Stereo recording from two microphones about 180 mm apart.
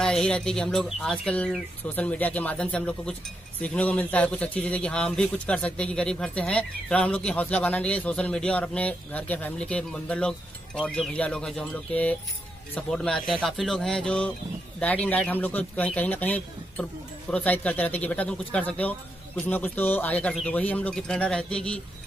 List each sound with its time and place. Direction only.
0.0 s a man's voice: 5° left (ahead or behind)